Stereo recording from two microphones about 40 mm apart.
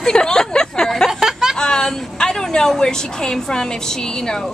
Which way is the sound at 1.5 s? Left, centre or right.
Centre.